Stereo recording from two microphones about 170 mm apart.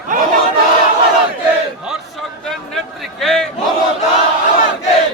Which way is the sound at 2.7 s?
Centre (ahead or behind).